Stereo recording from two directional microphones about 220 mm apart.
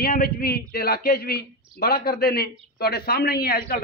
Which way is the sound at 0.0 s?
45° left (ahead or behind).